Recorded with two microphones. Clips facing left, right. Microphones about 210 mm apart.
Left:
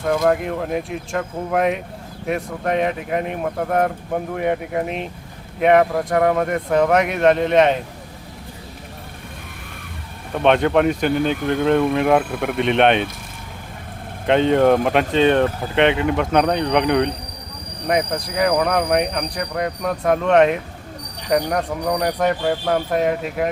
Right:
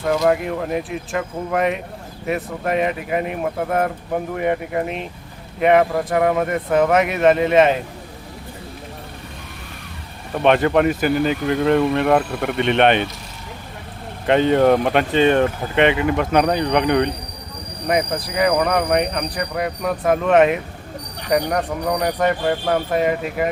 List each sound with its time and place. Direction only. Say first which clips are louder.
0.0 s speech: even; centre (ahead or behind)
10.3 s speech: even; centre (ahead or behind)
14.3 s speech: even; centre (ahead or behind)